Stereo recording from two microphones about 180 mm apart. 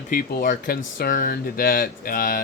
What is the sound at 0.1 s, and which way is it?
Speech, 50° left (ahead or behind).